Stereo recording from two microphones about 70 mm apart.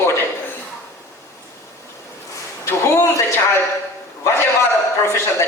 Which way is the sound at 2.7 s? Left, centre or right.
Left.